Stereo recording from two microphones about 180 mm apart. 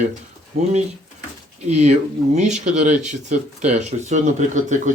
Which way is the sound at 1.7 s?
40° right (ahead or behind).